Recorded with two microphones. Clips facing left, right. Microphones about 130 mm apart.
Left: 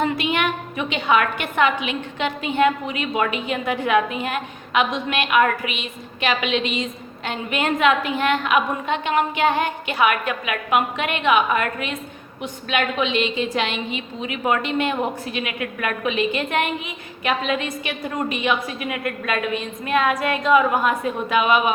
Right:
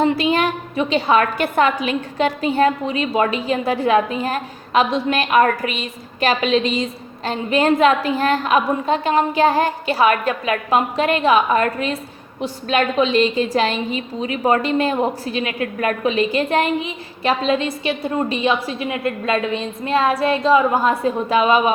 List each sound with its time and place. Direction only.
0.0 s a woman's voice: 35° right (ahead or behind)